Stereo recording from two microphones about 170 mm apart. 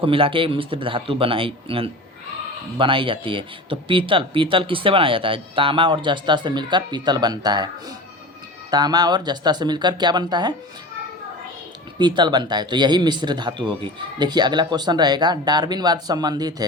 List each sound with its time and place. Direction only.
0.0 s a man's voice: 30° right (ahead or behind)
11.9 s a man's voice: 25° right (ahead or behind)